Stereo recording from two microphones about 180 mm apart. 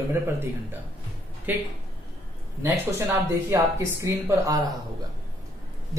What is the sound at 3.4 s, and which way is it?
Speech, 15° right (ahead or behind).